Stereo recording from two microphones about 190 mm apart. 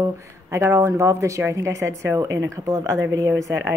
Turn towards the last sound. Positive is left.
turn(degrees=-15)  # may be behind; listen again after turning